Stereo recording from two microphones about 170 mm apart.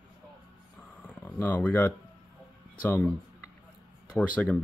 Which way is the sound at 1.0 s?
10° left (ahead or behind).